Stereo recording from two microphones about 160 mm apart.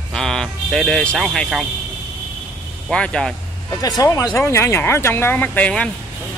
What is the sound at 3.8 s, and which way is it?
A man's voice, 20° left (ahead or behind).